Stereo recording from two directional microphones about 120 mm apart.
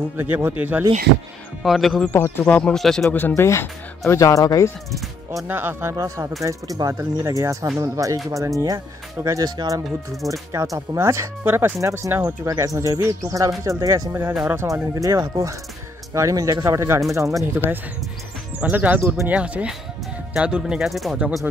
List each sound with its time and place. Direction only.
0.2 s speech: 15° right (ahead or behind)
1.6 s speech: centre (ahead or behind)
2.0 s speech: 20° left (ahead or behind); by 3.1 s 5° left (ahead or behind)
3.1 s speech: 15° left (ahead or behind)
5.5 s speech: 20° right (ahead or behind)
18.6 s speech: 15° right (ahead or behind)